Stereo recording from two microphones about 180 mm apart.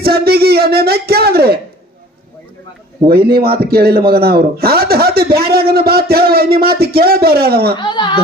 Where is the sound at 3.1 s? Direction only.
60° right (ahead or behind).